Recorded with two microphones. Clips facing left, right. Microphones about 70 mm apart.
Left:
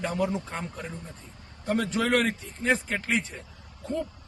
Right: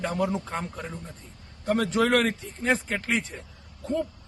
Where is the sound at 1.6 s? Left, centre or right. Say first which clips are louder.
Right 3 dB; right.